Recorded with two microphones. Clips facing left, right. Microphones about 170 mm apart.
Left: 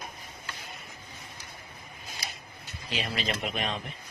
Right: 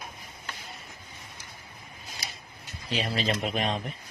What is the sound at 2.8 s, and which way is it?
A man's voice, 35° right (ahead or behind).